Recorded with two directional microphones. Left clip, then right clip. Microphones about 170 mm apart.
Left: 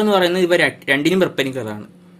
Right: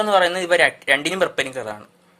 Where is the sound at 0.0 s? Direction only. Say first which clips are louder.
Left 2 dB; 25° right (ahead or behind).